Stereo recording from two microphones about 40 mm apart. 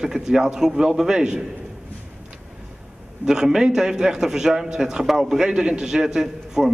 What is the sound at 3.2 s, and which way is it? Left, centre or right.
A man's voice, centre.